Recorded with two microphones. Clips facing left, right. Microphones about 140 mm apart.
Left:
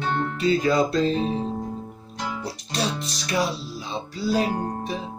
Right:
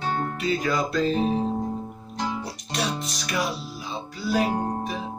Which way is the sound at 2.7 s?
30° left (ahead or behind).